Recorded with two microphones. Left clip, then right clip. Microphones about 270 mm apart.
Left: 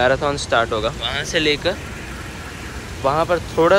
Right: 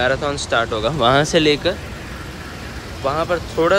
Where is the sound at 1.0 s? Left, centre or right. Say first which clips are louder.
Right 6 dB; right.